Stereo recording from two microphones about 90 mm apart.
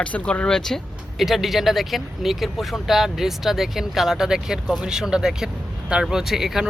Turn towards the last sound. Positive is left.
turn(degrees=-5)  # may be behind; listen again after turning